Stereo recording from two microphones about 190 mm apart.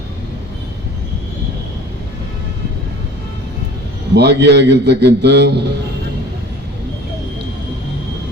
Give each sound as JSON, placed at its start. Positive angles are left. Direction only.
{"t": 4.1, "sound": "a man's voice", "side_deg": -60}